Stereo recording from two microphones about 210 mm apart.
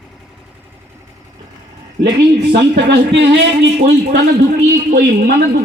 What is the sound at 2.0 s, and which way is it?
Speech, 40° right (ahead or behind).